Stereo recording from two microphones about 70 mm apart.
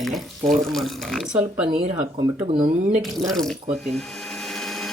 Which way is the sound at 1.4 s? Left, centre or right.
Centre.